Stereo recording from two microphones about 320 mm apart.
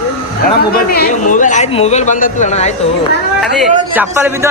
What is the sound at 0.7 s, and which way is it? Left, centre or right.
Speech, left.